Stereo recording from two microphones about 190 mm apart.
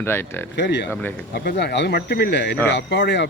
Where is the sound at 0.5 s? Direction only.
65° left (ahead or behind).